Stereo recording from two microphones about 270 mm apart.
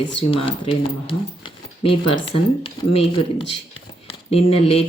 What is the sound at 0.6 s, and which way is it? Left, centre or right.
Speech, centre.